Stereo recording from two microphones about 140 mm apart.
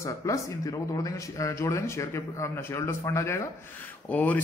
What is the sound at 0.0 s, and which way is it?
A man's voice, 20° left (ahead or behind).